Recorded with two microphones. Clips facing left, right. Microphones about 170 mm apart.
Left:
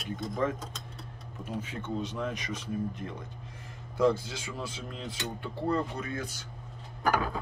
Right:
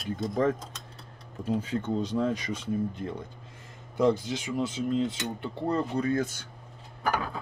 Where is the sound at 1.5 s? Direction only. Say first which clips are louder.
Right 4 dB; 35° right (ahead or behind).